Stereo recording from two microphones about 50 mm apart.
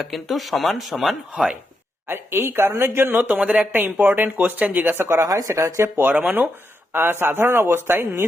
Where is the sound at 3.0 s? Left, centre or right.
Right.